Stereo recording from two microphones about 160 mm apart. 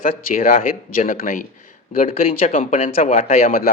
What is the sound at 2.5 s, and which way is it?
Speech, 55° left (ahead or behind).